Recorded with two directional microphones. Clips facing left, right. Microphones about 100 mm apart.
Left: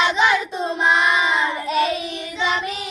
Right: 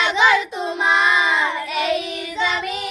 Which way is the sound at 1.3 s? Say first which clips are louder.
Left 1 dB; 30° left (ahead or behind).